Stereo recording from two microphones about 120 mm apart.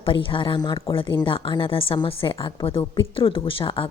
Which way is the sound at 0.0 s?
45° left (ahead or behind).